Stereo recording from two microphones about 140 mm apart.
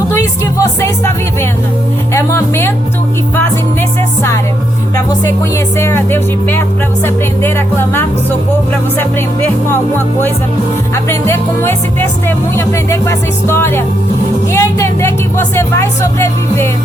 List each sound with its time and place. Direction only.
0.2 s music: 20° left (ahead or behind)
5.0 s speech: 20° left (ahead or behind)
10.9 s speech: 20° left (ahead or behind)